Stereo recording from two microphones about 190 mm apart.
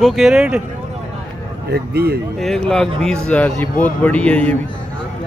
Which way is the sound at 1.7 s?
55° right (ahead or behind).